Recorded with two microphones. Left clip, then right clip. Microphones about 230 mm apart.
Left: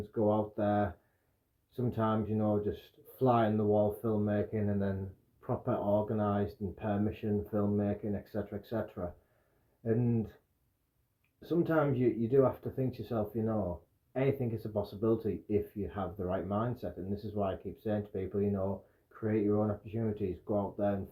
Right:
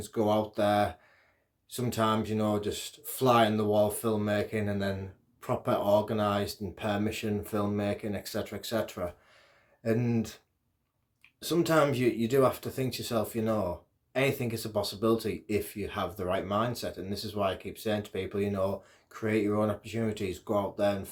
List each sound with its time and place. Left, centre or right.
0.1 s speech: centre
11.3 s speech: centre